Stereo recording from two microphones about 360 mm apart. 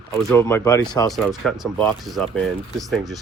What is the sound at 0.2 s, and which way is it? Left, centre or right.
Speech, centre.